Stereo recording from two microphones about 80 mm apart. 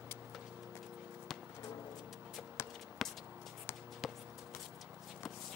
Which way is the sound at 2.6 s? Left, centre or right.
Left.